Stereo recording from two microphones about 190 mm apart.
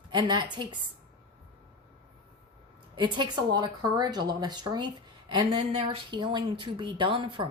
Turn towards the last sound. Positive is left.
turn(degrees=-25)  # may be behind; listen again after turning